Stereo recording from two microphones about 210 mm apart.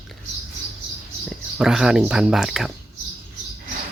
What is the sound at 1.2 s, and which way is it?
Speech, centre (ahead or behind).